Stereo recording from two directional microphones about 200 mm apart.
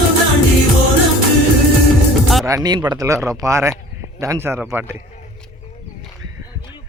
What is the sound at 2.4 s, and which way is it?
Speech, 15° right (ahead or behind).